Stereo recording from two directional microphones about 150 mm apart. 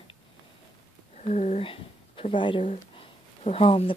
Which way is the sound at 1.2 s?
50° left (ahead or behind).